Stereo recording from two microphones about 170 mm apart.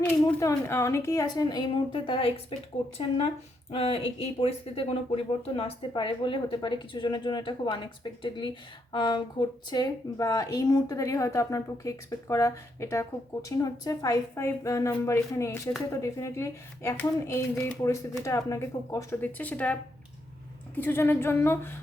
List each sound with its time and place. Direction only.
0.0 s speech: 15° left (ahead or behind); by 2.4 s 30° left (ahead or behind)
3.7 s speech: 35° left (ahead or behind); by 21.8 s 15° left (ahead or behind)